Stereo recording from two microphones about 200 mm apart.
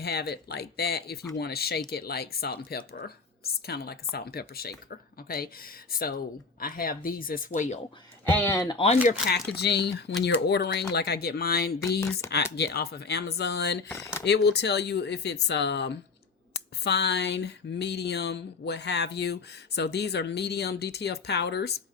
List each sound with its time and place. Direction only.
0.0 s speech: 55° left (ahead or behind)
8.2 s speech: 10° left (ahead or behind)
8.7 s speech: 30° left (ahead or behind)
9.2 s speech: 55° left (ahead or behind)
11.8 s speech: 15° left (ahead or behind)
12.3 s speech: 55° left (ahead or behind)
13.8 s speech: 10° left (ahead or behind)
14.3 s speech: 55° left (ahead or behind)